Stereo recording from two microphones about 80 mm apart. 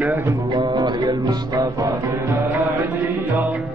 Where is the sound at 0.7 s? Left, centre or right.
Right.